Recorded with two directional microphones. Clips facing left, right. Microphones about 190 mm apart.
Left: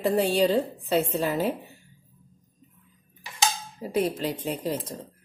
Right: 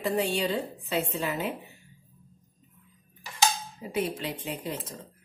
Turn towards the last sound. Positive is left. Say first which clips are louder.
# left 6 dB
turn(degrees=40)  # may be behind; listen again after turning